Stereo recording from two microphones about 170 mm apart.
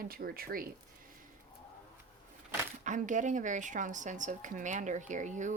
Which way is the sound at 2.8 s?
45° right (ahead or behind).